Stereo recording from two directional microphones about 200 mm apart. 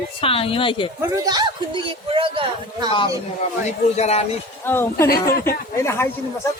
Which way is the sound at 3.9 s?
35° left (ahead or behind).